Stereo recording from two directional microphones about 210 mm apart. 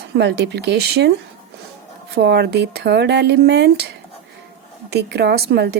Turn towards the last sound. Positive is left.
turn(degrees=-50)  # may be behind; listen again after turning